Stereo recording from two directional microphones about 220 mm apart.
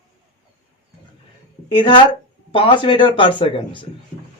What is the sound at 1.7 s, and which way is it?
Speech, 20° left (ahead or behind).